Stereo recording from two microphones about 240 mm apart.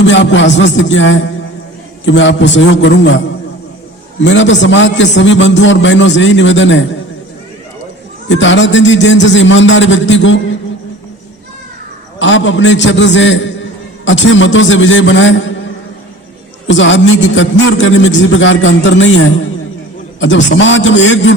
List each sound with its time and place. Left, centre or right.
0.0 s a man's voice: left
4.2 s a man's voice: left
8.3 s a man's voice: left
12.2 s a man's voice: left
16.6 s a man's voice: left